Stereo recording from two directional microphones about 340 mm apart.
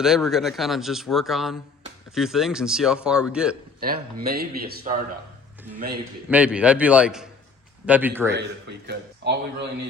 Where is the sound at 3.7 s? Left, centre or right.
Right.